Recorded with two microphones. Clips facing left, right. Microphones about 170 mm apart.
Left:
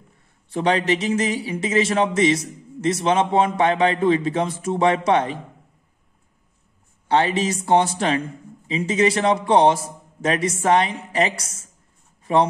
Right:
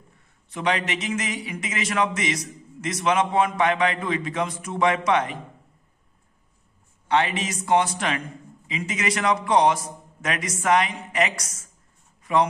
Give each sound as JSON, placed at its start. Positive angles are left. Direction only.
{"t": 0.5, "sound": "a man's voice", "side_deg": 35}
{"t": 7.1, "sound": "a man's voice", "side_deg": 35}
{"t": 12.2, "sound": "a sound", "side_deg": 30}